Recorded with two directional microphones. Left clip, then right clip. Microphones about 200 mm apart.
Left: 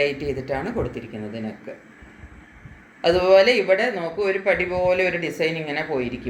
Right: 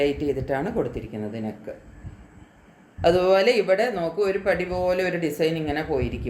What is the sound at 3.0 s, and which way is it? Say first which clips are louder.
Speech: left 3 dB; 40° right (ahead or behind).